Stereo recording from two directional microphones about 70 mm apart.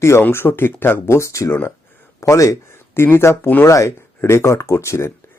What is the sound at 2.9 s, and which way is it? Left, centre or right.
Speech, left.